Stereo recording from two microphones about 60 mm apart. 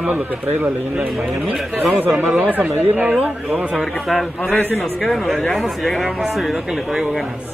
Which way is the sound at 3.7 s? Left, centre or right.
Centre.